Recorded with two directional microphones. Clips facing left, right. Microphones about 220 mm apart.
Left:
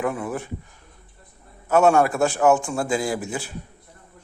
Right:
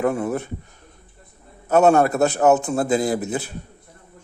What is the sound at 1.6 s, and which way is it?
A man's voice, 40° right (ahead or behind).